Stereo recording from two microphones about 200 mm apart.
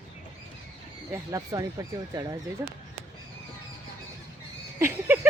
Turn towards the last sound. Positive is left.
turn(degrees=-10)  # may be behind; listen again after turning